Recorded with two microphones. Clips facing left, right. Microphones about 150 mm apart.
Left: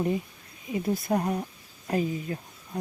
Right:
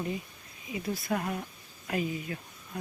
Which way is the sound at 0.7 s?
50° left (ahead or behind).